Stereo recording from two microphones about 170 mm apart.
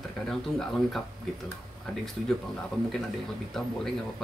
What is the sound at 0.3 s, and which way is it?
Speech, centre (ahead or behind).